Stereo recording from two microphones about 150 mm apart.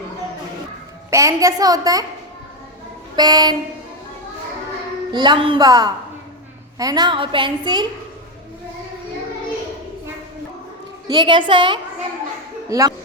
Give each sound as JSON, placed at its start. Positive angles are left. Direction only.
{"t": 1.1, "sound": "a woman's voice", "side_deg": -20}
{"t": 3.2, "sound": "a woman's voice", "side_deg": -25}
{"t": 5.1, "sound": "a woman's voice", "side_deg": -30}
{"t": 11.1, "sound": "a woman's voice", "side_deg": -30}